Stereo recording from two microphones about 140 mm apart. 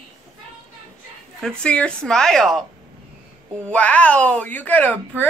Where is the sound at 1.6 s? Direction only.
10° left (ahead or behind).